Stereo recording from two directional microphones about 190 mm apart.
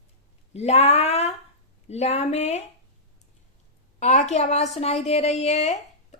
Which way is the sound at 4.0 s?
40° left (ahead or behind).